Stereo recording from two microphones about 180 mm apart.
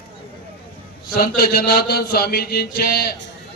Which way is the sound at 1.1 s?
55° left (ahead or behind).